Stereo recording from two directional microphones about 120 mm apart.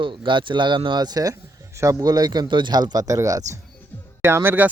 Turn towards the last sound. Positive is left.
turn(degrees=-15)  # may be behind; listen again after turning